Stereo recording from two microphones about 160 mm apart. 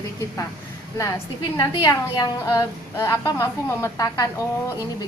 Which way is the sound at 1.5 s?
20° left (ahead or behind).